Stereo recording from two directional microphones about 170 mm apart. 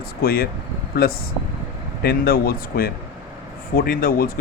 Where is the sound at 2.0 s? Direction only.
65° left (ahead or behind).